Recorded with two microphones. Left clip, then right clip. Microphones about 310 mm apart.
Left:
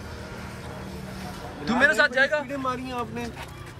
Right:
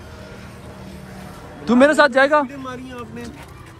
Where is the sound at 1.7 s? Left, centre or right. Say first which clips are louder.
Right 7 dB; centre.